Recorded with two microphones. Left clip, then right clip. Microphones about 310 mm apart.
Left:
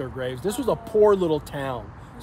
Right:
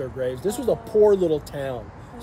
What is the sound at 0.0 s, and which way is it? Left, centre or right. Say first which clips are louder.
Speech: right 2 dB; centre.